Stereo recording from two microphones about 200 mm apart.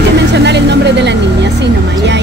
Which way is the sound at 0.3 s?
60° right (ahead or behind).